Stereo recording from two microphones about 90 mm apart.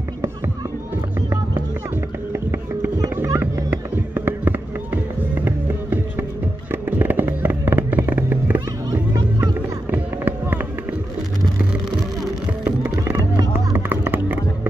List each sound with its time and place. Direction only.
2.5 s music: 25° right (ahead or behind)
9.4 s run: 20° right (ahead or behind)
13.7 s a sound: 20° right (ahead or behind)